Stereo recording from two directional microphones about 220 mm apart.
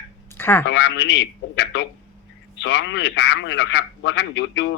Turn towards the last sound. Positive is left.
turn(degrees=55)  # may be behind; listen again after turning